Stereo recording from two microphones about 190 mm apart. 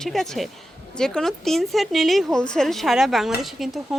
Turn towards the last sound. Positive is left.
turn(degrees=0)  # may be behind; listen again after turning